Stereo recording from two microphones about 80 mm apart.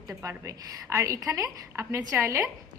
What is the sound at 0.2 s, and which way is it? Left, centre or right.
A woman's voice, right.